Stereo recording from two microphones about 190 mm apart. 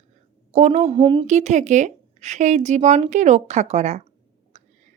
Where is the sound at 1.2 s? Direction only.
40° right (ahead or behind).